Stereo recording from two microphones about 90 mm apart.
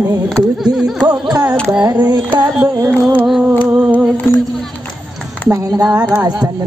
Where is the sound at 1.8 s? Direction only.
50° right (ahead or behind).